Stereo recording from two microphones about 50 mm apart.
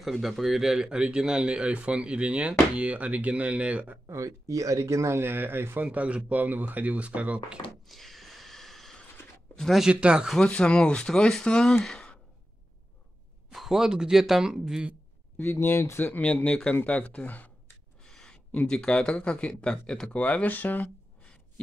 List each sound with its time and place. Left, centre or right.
0.0 s speech: centre; by 4.0 s right
4.1 s speech: right
5.2 s speech: right
5.8 s speech: right
7.8 s a sound: centre
9.9 s speech: right
10.4 s speech: centre
13.5 s speech: centre
15.3 s speech: left
16.1 s speech: left
18.0 s a sound: centre
18.7 s speech: centre
20.2 s speech: left